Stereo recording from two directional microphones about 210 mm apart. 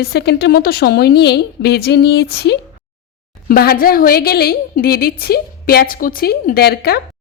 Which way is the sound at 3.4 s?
45° left (ahead or behind).